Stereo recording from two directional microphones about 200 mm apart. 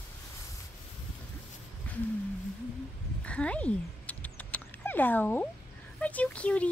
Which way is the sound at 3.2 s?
5° left (ahead or behind).